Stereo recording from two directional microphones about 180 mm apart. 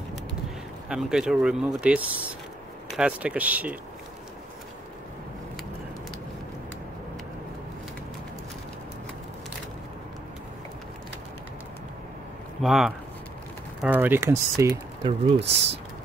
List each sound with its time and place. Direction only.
0.8 s speech: 5° right (ahead or behind)
12.6 s speech: centre (ahead or behind)
15.0 s speech: 35° right (ahead or behind)